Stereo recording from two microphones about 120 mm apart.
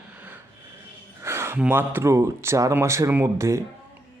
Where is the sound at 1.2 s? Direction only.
20° right (ahead or behind).